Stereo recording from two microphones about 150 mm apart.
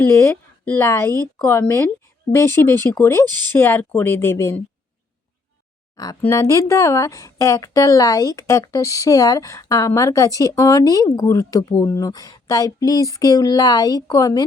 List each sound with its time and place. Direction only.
0.0 s speech: 15° left (ahead or behind)
6.0 s speech: 20° left (ahead or behind)